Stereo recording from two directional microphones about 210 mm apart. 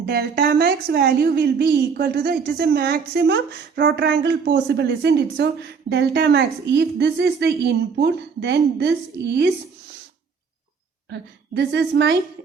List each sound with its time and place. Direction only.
0.0 s a woman's voice: 50° right (ahead or behind)
11.1 s a woman's voice: 55° right (ahead or behind)